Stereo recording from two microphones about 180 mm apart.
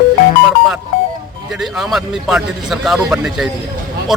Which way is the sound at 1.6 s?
Centre (ahead or behind).